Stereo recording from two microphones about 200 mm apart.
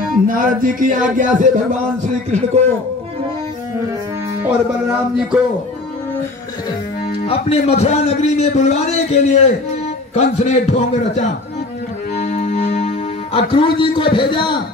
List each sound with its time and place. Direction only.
0.1 s music: 45° right (ahead or behind)
1.1 s speech: 40° right (ahead or behind)
7.2 s a man's voice: 30° left (ahead or behind)
12.3 s music: 35° left (ahead or behind)